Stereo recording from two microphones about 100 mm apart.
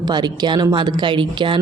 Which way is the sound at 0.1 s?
45° right (ahead or behind).